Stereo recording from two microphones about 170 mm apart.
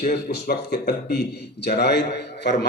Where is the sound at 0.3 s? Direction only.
65° left (ahead or behind).